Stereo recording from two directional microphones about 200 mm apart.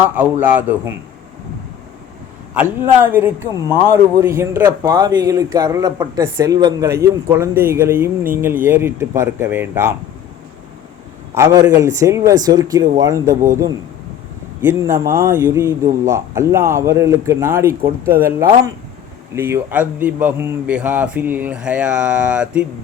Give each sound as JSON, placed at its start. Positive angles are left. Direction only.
{"t": 0.1, "sound": "speech", "side_deg": -10}
{"t": 2.6, "sound": "speech", "side_deg": -10}
{"t": 11.3, "sound": "speech", "side_deg": -15}